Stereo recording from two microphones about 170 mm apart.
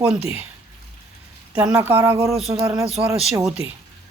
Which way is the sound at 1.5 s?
10° right (ahead or behind).